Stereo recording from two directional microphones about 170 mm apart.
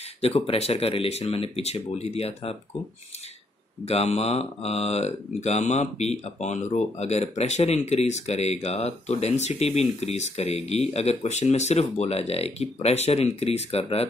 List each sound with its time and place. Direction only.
0.2 s speech: 35° left (ahead or behind)
3.8 s speech: 40° left (ahead or behind)